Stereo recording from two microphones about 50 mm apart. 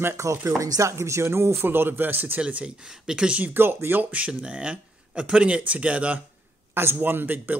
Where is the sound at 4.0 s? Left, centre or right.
Right.